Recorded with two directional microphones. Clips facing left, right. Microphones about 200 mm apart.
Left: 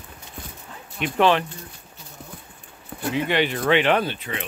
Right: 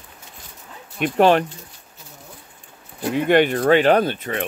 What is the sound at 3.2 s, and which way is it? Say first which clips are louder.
Speech: right 7 dB; 50° right (ahead or behind).